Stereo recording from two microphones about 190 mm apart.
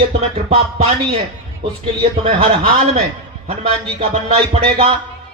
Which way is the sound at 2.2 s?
30° right (ahead or behind).